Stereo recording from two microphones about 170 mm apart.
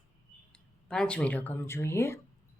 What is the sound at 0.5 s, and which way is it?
Speech, 5° left (ahead or behind).